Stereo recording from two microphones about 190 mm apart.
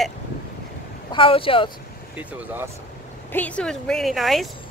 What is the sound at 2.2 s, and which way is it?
Speech, 10° right (ahead or behind).